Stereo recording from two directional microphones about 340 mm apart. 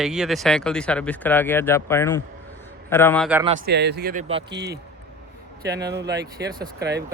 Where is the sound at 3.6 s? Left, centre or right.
Right.